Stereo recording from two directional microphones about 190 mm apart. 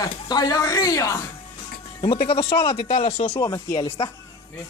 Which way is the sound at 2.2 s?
30° left (ahead or behind).